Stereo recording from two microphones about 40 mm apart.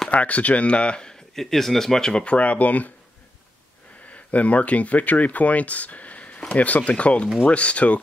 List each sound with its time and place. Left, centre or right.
0.1 s speech: left
1.3 s speech: centre
2.2 s speech: left
4.1 s speech: left